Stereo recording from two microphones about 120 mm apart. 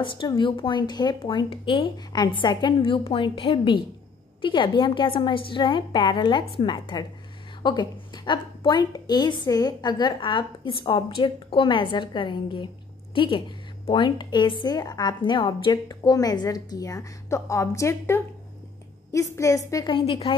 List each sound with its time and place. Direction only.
0.0 s a woman's voice: 45° left (ahead or behind); by 19.9 s 30° left (ahead or behind)
19.9 s speech: 50° left (ahead or behind)